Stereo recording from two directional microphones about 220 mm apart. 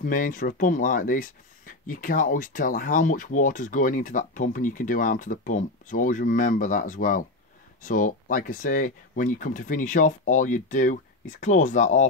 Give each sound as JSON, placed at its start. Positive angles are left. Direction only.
{"t": 0.0, "sound": "speech", "side_deg": 40}